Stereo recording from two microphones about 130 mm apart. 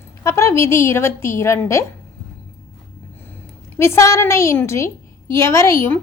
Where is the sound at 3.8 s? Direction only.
20° left (ahead or behind).